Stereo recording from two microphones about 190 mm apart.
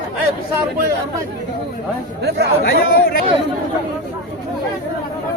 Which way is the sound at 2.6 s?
50° left (ahead or behind).